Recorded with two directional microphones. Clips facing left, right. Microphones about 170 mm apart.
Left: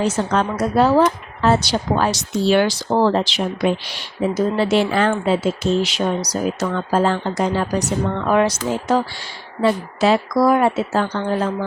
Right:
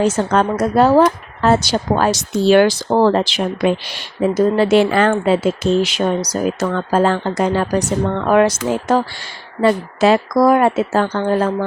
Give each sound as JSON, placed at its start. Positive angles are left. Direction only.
{"t": 0.0, "sound": "speech", "side_deg": -45}